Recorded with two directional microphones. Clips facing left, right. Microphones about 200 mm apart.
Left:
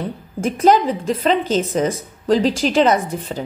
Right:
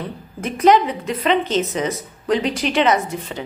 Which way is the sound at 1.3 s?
5° left (ahead or behind).